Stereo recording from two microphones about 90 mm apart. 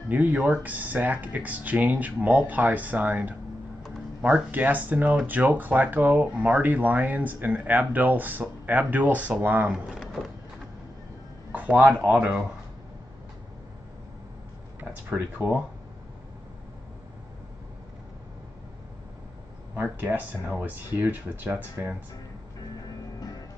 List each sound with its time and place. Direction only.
0.1 s speech: 15° right (ahead or behind)
9.7 s speech: 5° right (ahead or behind)
11.5 s a sound: 15° right (ahead or behind)
12.0 s speech: 15° right (ahead or behind)
14.8 s speech: 20° right (ahead or behind)
19.7 s speech: 20° right (ahead or behind)